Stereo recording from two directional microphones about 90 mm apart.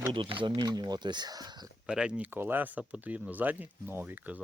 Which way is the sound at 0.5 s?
50° right (ahead or behind).